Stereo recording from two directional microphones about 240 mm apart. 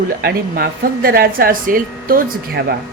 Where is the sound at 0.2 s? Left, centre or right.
Right.